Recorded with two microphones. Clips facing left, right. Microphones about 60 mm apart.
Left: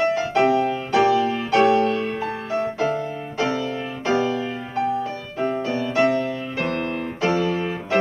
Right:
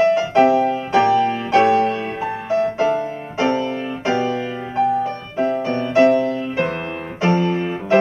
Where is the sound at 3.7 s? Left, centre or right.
Centre.